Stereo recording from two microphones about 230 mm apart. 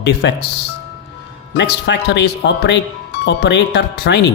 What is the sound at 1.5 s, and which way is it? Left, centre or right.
Speech, left.